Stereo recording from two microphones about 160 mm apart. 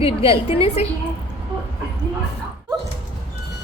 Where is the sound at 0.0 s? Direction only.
35° left (ahead or behind).